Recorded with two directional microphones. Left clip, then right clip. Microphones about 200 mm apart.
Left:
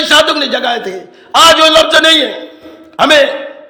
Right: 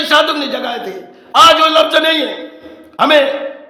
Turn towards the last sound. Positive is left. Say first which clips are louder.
# left 2 dB
turn(degrees=15)  # may be behind; listen again after turning